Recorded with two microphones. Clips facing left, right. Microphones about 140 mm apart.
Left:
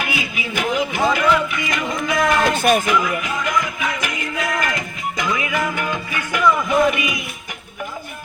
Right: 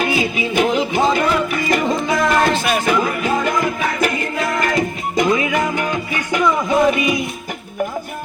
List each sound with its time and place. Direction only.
0.0 s music: 30° right (ahead or behind)
2.6 s music: 45° left (ahead or behind)
2.8 s music: 35° right (ahead or behind)
6.9 s music: 30° right (ahead or behind)